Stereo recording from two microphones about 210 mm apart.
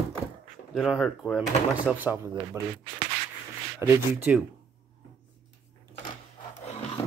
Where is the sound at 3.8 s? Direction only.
10° right (ahead or behind).